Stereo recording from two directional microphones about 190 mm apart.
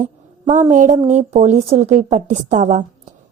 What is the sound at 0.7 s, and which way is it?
A woman's voice, 40° right (ahead or behind).